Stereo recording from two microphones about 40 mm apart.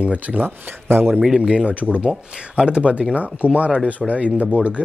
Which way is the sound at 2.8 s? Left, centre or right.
Right.